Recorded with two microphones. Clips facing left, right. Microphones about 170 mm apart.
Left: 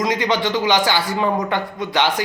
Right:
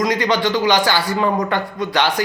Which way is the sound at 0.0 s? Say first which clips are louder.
Right 2 dB; 20° left (ahead or behind).